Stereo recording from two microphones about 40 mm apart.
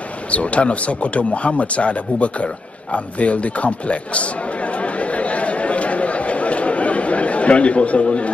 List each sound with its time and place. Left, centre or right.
0.3 s speech: left